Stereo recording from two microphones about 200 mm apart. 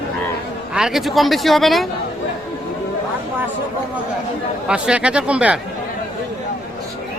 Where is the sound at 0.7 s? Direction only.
5° right (ahead or behind).